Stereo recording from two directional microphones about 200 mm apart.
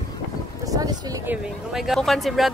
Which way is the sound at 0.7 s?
20° right (ahead or behind).